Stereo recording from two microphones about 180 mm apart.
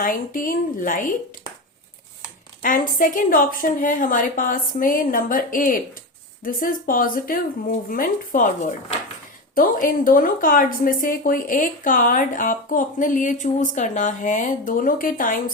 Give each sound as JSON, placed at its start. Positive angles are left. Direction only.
{"t": 0.0, "sound": "speech", "side_deg": 50}
{"t": 2.6, "sound": "speech", "side_deg": 50}